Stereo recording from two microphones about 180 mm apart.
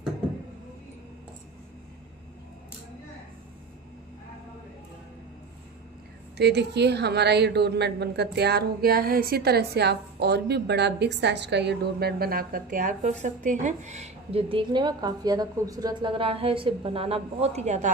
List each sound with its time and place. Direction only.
6.3 s a woman's voice: 65° right (ahead or behind); by 17.9 s 40° right (ahead or behind)